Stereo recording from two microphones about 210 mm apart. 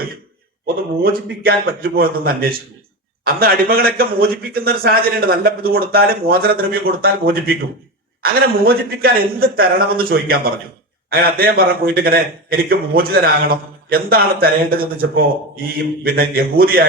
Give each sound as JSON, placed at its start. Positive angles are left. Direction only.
{"t": 1.0, "sound": "a man's voice", "side_deg": -45}